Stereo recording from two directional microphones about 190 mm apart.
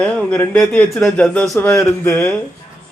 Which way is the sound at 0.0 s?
5° left (ahead or behind).